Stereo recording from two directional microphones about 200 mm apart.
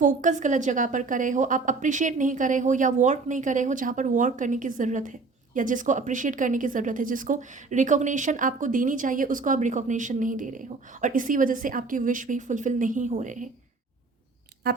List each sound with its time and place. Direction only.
0.0 s a woman's voice: 40° right (ahead or behind)